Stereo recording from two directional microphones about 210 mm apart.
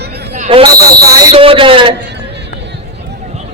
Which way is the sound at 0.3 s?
35° right (ahead or behind).